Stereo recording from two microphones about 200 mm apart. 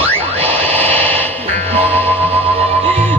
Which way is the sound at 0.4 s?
10° left (ahead or behind).